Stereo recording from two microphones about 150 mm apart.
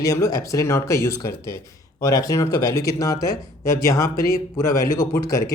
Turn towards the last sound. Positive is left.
turn(degrees=25)  # may be behind; listen again after turning